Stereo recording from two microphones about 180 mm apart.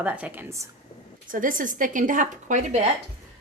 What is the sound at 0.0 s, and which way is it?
Speech, 10° right (ahead or behind).